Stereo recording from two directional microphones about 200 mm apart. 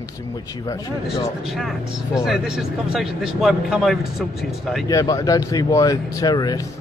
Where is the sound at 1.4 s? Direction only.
Centre (ahead or behind).